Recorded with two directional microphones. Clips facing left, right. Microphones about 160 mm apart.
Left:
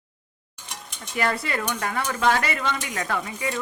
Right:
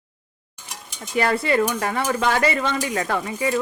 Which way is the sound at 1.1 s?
25° right (ahead or behind).